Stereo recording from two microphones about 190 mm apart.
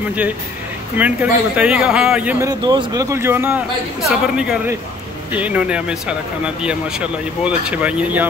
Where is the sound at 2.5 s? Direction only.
20° right (ahead or behind).